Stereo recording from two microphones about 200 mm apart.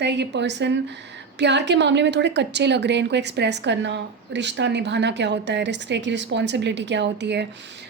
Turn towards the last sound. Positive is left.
turn(degrees=-60)  # may be behind; listen again after turning